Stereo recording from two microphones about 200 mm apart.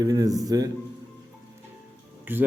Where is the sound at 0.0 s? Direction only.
20° right (ahead or behind).